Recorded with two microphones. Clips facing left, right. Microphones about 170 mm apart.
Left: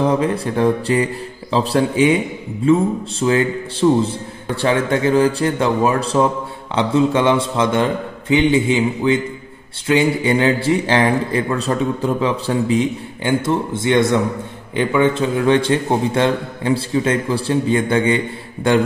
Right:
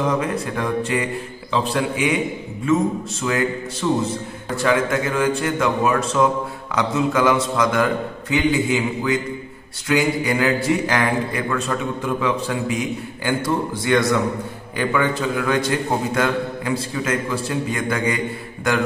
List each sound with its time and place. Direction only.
0.0 s a man's voice: 30° left (ahead or behind)